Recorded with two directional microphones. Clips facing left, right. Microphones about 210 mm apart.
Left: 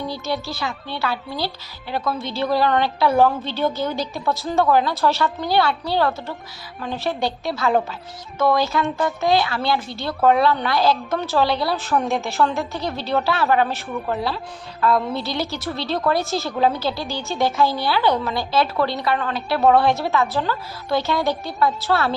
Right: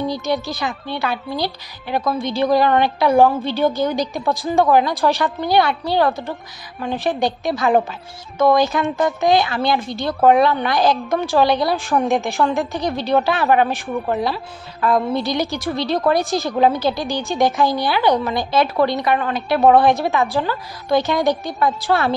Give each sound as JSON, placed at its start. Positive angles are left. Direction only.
{"t": 0.1, "sound": "speech", "side_deg": -15}